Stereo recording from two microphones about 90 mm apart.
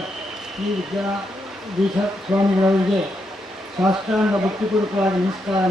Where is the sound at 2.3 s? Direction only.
10° right (ahead or behind).